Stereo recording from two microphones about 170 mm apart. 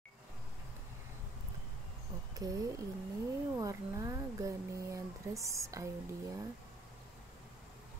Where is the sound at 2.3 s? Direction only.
20° right (ahead or behind).